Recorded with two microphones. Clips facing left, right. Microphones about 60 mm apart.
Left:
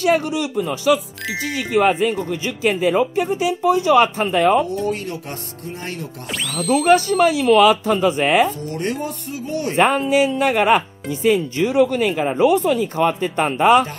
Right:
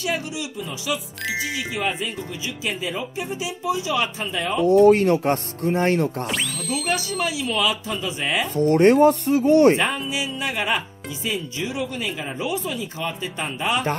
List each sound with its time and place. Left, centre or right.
0.0 s speech: left
4.8 s speech: right
6.7 s speech: left
8.5 s speech: right
9.8 s speech: left